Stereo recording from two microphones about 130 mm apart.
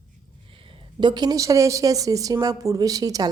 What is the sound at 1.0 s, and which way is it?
Speech, 35° right (ahead or behind).